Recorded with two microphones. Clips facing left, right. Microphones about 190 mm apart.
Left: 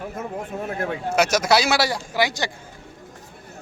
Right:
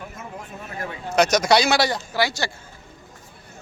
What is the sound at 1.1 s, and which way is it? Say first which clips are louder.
Speech: right 2 dB; 5° left (ahead or behind).